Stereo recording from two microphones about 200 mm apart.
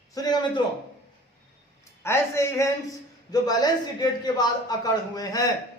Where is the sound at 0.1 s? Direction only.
20° left (ahead or behind).